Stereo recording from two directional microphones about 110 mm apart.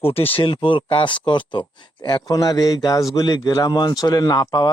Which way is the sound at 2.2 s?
35° left (ahead or behind).